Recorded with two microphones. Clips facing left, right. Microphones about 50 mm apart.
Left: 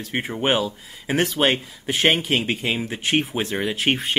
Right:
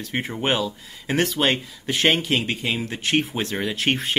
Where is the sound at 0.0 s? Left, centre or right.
Centre.